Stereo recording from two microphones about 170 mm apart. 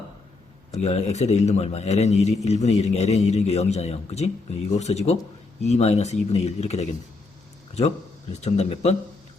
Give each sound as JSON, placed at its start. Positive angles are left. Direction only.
{"t": 0.7, "sound": "a man's voice", "side_deg": 40}
{"t": 8.3, "sound": "a man's voice", "side_deg": 40}